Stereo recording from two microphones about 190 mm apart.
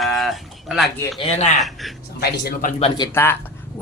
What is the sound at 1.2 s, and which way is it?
Speech, 35° left (ahead or behind).